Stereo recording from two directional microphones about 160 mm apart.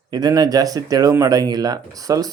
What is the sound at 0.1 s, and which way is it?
Speech, 25° right (ahead or behind).